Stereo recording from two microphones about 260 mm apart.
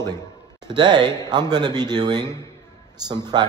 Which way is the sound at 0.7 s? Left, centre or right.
Centre.